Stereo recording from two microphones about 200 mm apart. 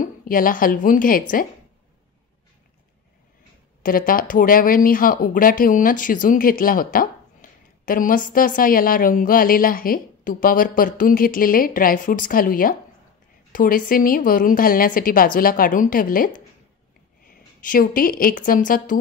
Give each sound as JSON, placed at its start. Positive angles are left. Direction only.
{"t": 0.0, "sound": "a woman's voice", "side_deg": 45}
{"t": 3.8, "sound": "a woman's voice", "side_deg": 45}
{"t": 17.6, "sound": "a woman's voice", "side_deg": 45}